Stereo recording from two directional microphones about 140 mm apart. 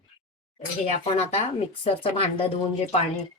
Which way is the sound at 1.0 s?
50° left (ahead or behind).